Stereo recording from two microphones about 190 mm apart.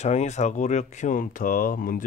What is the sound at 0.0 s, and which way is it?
Speech, 35° left (ahead or behind).